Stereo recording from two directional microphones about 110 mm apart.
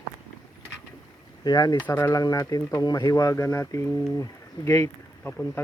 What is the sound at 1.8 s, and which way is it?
Speech, 25° left (ahead or behind).